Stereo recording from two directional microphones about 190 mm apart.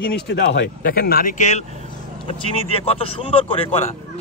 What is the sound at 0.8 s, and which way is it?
A man's voice, 50° left (ahead or behind).